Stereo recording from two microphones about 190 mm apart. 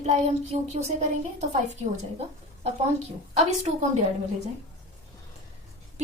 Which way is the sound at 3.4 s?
35° right (ahead or behind).